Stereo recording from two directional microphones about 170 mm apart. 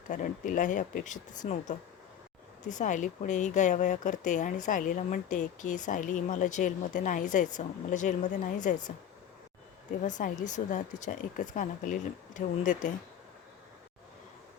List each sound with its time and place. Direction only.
0.1 s speech: 50° left (ahead or behind)
10.0 s speech: 45° left (ahead or behind)